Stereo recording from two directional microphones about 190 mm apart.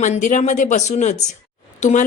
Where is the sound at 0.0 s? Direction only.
40° left (ahead or behind).